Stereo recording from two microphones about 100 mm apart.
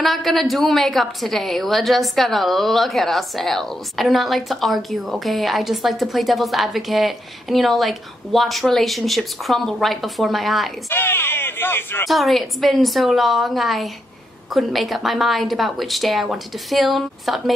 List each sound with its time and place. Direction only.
0.0 s a woman's voice: centre (ahead or behind)
10.9 s speech: 20° left (ahead or behind)
12.1 s a woman's voice: centre (ahead or behind)